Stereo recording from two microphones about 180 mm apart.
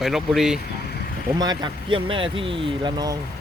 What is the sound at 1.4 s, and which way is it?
Speech, 25° right (ahead or behind).